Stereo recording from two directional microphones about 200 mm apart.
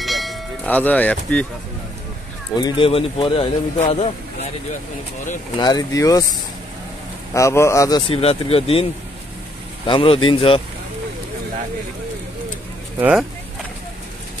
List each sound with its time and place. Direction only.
0.0 s a sound: centre (ahead or behind)
2.6 s speech: 25° left (ahead or behind)
5.6 s speech: 20° left (ahead or behind)
7.3 s speech: 15° left (ahead or behind)
8.1 s speech: 30° left (ahead or behind)
9.8 s speech: 25° left (ahead or behind)